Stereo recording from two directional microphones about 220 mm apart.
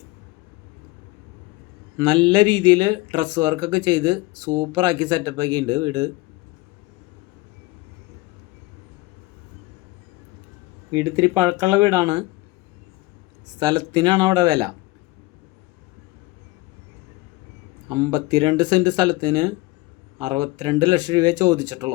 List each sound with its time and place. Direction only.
2.0 s speech: 20° right (ahead or behind)
10.9 s speech: 15° right (ahead or behind)
13.6 s speech: 20° right (ahead or behind)
17.8 s speech: 20° right (ahead or behind)